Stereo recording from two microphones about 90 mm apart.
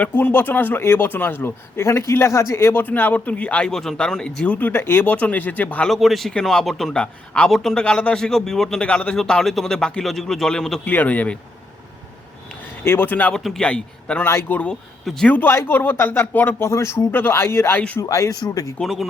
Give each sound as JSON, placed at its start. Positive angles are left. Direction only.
{"t": 0.0, "sound": "a man's voice", "side_deg": 20}
{"t": 5.8, "sound": "a man's voice", "side_deg": 0}
{"t": 10.8, "sound": "a man's voice", "side_deg": 20}
{"t": 12.8, "sound": "a man's voice", "side_deg": 25}
{"t": 13.3, "sound": "a man's voice", "side_deg": 5}
{"t": 14.3, "sound": "a man's voice", "side_deg": 25}
{"t": 14.7, "sound": "speech", "side_deg": 5}
{"t": 15.3, "sound": "a man's voice", "side_deg": 20}
{"t": 16.6, "sound": "a man's voice", "side_deg": 30}
{"t": 18.0, "sound": "speech", "side_deg": 40}
{"t": 18.8, "sound": "a man's voice", "side_deg": 0}